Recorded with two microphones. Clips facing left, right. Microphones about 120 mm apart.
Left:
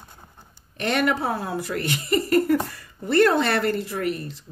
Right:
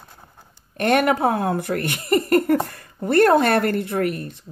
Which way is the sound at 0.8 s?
50° right (ahead or behind).